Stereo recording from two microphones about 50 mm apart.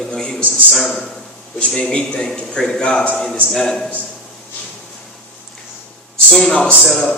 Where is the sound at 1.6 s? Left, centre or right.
Centre.